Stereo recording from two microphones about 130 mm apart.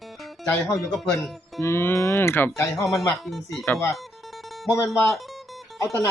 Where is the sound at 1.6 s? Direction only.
20° left (ahead or behind).